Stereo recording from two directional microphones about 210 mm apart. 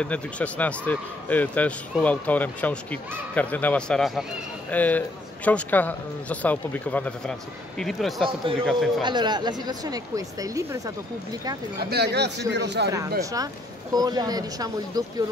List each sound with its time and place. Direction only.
0.0 s speech: 5° left (ahead or behind)
9.0 s speech: 20° right (ahead or behind)
11.9 s a man's voice: 50° right (ahead or behind)
13.2 s speech: 15° right (ahead or behind)